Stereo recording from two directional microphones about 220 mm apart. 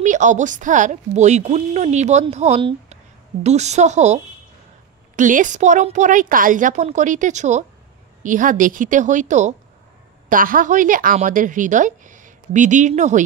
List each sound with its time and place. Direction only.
0.0 s speech: 35° right (ahead or behind)